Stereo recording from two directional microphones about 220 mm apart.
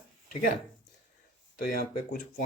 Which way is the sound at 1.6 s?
45° left (ahead or behind).